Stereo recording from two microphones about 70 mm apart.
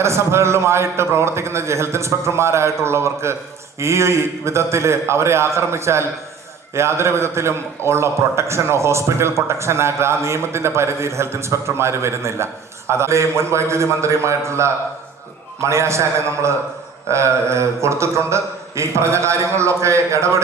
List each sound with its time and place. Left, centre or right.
0.0 s a man's voice: right